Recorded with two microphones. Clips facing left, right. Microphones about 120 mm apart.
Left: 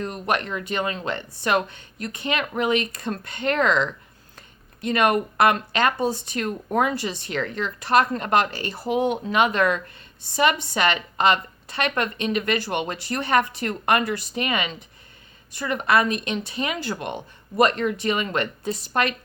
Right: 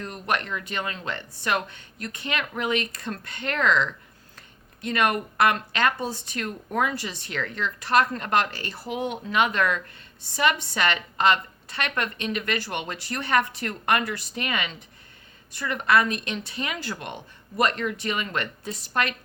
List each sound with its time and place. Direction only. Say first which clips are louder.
0.0 s speech: left 3 dB; 20° left (ahead or behind)